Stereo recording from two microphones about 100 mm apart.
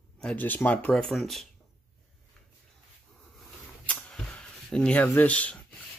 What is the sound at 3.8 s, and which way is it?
Cap gun, 10° left (ahead or behind).